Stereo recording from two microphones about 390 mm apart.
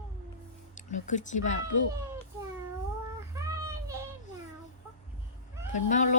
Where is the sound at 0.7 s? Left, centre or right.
Centre.